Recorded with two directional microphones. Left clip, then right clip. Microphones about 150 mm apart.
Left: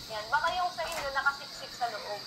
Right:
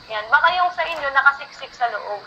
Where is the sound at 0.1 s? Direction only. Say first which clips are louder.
Right 13 dB; 40° right (ahead or behind).